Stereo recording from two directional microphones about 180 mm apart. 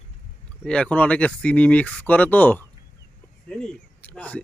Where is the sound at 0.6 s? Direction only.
5° left (ahead or behind).